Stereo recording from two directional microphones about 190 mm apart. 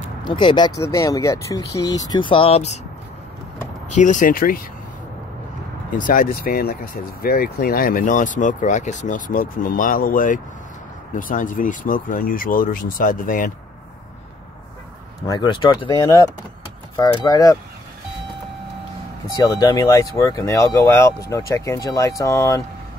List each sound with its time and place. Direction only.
0.2 s speech: 25° left (ahead or behind)
3.9 s speech: 40° left (ahead or behind)
5.9 s speech: 45° left (ahead or behind)
15.2 s speech: 25° left (ahead or behind)
19.3 s speech: 20° left (ahead or behind)